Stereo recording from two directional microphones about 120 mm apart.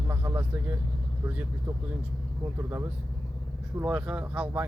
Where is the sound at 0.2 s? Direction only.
25° right (ahead or behind).